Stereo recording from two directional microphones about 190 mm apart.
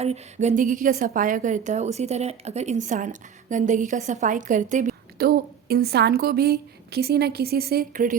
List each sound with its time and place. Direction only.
0.0 s a woman's voice: 35° right (ahead or behind)